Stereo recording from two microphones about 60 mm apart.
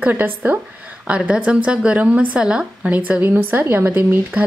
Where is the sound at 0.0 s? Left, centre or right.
Right.